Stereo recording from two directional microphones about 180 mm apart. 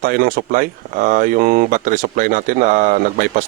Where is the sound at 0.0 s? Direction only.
55° right (ahead or behind).